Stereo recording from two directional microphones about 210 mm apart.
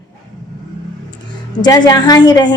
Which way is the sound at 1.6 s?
20° left (ahead or behind).